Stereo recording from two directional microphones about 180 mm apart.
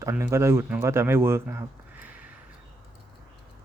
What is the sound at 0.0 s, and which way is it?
Speech, 15° right (ahead or behind).